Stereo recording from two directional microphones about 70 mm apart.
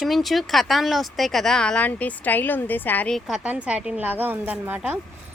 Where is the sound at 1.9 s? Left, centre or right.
Left.